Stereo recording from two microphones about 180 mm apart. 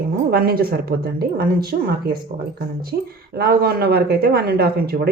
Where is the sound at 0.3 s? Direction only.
55° right (ahead or behind).